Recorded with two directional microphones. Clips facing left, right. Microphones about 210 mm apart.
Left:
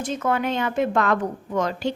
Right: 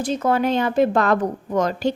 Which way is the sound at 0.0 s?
35° right (ahead or behind).